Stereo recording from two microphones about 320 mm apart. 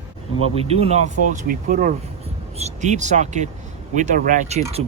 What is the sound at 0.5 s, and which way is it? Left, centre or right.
Speech, centre.